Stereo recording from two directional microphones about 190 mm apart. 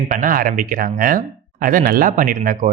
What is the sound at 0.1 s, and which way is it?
Speech, 45° right (ahead or behind).